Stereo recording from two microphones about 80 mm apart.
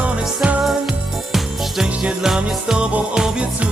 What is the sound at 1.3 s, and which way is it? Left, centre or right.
Jingle bell, centre.